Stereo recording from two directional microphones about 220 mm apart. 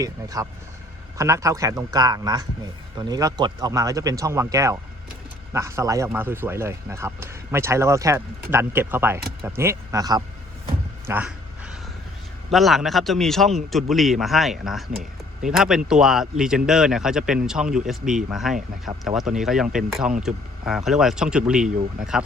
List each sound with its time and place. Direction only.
0.0 s speech: 15° right (ahead or behind)
11.0 s a sound: 10° right (ahead or behind)
12.5 s speech: centre (ahead or behind)